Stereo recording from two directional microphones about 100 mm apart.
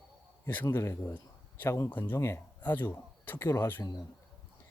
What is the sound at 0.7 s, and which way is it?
Speech, 25° left (ahead or behind).